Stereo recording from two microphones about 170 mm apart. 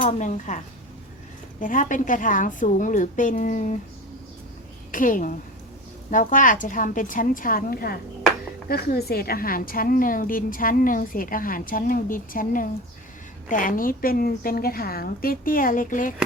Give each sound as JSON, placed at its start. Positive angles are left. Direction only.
{"t": 0.0, "sound": "a woman's voice", "side_deg": 45}
{"t": 4.9, "sound": "a woman's voice", "side_deg": 50}